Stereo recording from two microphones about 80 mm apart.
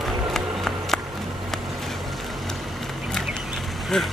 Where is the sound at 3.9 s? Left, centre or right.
Centre.